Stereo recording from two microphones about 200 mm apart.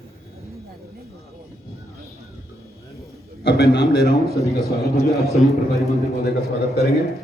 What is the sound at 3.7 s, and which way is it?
Speech, 55° left (ahead or behind).